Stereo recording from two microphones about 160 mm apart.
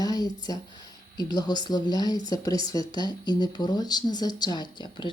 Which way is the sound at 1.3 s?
25° left (ahead or behind).